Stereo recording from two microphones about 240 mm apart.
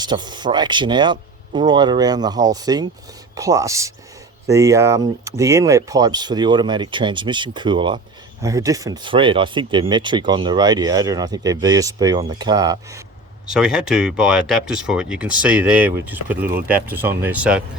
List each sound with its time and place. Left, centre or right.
0.0 s speech: centre
13.5 s speech: centre